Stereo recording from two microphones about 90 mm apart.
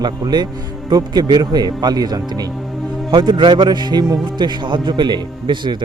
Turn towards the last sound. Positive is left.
turn(degrees=-60)  # may be behind; listen again after turning